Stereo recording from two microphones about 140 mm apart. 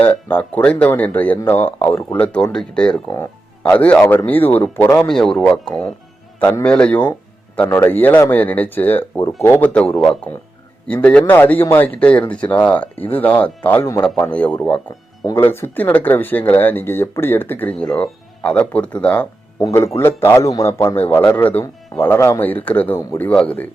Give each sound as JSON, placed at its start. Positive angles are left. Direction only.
{"t": 0.0, "sound": "speech", "side_deg": 10}
{"t": 5.0, "sound": "speech", "side_deg": 5}
{"t": 19.5, "sound": "a man's voice", "side_deg": 20}